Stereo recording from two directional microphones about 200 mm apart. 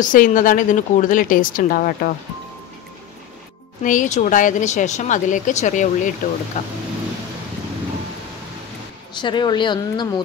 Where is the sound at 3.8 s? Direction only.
40° left (ahead or behind).